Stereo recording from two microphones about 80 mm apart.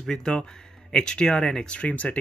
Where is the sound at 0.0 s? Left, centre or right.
Centre.